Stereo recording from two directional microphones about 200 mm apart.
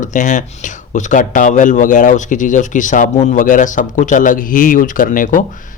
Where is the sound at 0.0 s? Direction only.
40° left (ahead or behind).